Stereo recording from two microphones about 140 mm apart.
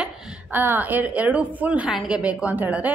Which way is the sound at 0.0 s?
15° right (ahead or behind).